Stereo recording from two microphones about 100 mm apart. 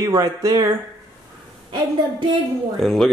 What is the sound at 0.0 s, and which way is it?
Speech, 35° right (ahead or behind).